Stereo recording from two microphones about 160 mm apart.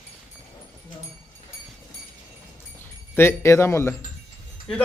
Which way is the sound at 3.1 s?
15° left (ahead or behind).